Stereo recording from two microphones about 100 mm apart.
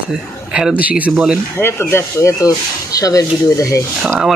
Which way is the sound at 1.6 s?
25° left (ahead or behind).